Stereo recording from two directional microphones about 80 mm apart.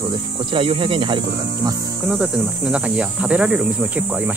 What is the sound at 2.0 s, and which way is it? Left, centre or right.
Speech, centre.